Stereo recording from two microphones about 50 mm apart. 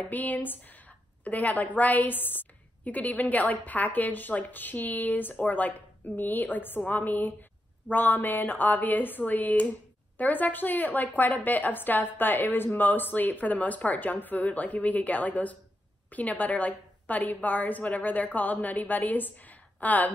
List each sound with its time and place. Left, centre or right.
0.1 s a woman's voice: left